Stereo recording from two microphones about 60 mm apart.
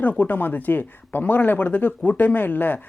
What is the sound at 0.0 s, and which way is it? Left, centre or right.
Speech, left.